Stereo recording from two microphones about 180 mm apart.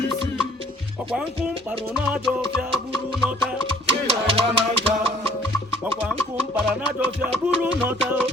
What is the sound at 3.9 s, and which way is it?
Music, 30° right (ahead or behind).